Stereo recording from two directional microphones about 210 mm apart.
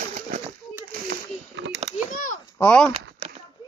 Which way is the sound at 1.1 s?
50° right (ahead or behind).